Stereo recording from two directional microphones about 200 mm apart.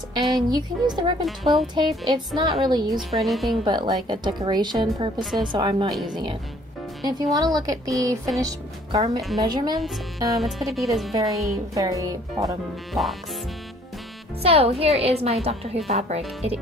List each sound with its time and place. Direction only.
0.3 s a woman's voice: 20° right (ahead or behind)
1.2 s speech: centre (ahead or behind)
1.6 s a woman's voice: 20° right (ahead or behind)
3.1 s speech: centre (ahead or behind)
3.6 s a woman's voice: 25° right (ahead or behind)
5.9 s speech: centre (ahead or behind)
7.0 s a woman's voice: 20° right (ahead or behind)
10.3 s speech: centre (ahead or behind)
11.1 s speech: 15° right (ahead or behind)
12.9 s speech: centre (ahead or behind)
14.4 s a woman's voice: 30° right (ahead or behind)